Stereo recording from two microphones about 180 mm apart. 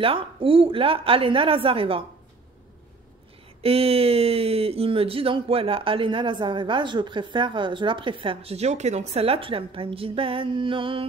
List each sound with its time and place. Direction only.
0.0 s speech: 30° right (ahead or behind)
3.6 s speech: 35° right (ahead or behind)